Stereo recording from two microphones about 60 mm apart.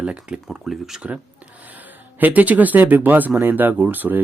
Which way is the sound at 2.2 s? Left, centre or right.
Right.